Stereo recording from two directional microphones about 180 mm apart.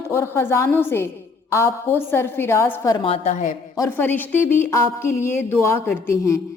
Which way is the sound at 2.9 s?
30° left (ahead or behind).